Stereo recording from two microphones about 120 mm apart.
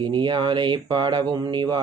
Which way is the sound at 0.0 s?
40° right (ahead or behind).